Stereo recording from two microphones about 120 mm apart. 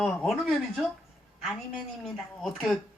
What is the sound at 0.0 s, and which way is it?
Speech, 5° left (ahead or behind).